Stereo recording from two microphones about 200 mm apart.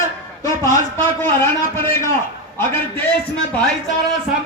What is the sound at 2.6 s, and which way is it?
Speech, 10° left (ahead or behind).